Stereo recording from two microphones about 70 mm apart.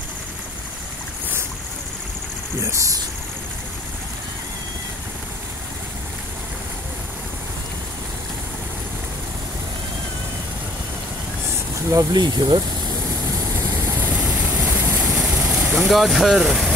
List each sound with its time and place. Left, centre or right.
11.9 s speech: right
14.1 s vehicle: right
14.8 s vehicle: right
15.7 s speech: centre